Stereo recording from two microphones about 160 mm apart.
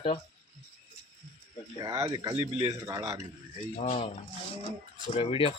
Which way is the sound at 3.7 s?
40° left (ahead or behind).